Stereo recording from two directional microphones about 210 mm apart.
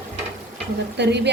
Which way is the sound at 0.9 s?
55° right (ahead or behind).